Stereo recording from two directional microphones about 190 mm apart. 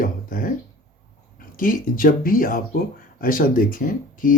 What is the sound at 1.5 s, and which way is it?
Speech, 45° left (ahead or behind).